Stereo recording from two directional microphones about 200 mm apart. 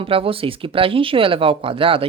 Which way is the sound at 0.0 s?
25° right (ahead or behind).